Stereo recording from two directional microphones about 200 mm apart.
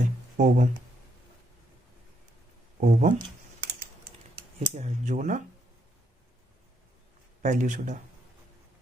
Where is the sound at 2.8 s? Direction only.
40° right (ahead or behind).